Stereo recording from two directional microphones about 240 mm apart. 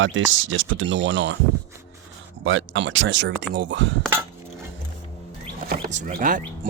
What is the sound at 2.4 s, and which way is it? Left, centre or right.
Speech, right.